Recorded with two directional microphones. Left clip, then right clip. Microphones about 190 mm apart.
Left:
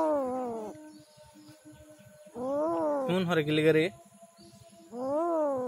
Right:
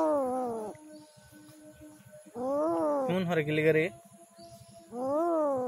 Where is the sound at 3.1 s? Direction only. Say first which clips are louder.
Left 2 dB; 25° left (ahead or behind).